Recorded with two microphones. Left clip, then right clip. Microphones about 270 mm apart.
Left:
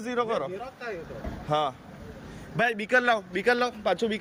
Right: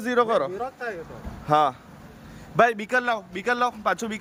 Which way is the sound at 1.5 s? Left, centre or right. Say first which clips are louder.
Right 7 dB; centre.